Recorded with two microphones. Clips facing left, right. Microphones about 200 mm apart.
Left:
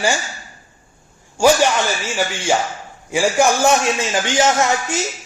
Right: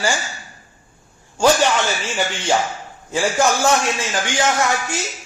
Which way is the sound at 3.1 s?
15° left (ahead or behind).